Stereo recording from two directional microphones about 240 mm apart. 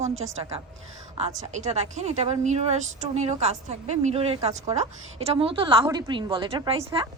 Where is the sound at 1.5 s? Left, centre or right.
Right.